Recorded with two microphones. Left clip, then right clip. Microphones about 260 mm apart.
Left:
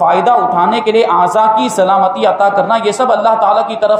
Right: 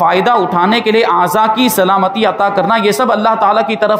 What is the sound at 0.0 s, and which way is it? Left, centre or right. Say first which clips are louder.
A man's voice: left 1 dB; right.